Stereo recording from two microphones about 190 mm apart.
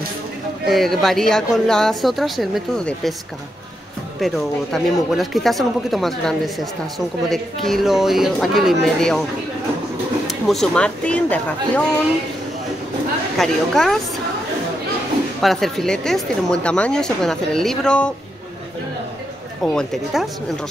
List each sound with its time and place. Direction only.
0.7 s speech: centre (ahead or behind)
4.2 s speech: centre (ahead or behind)
10.2 s speech: centre (ahead or behind)
13.4 s speech: centre (ahead or behind)
15.4 s speech: centre (ahead or behind)
19.6 s speech: 5° left (ahead or behind)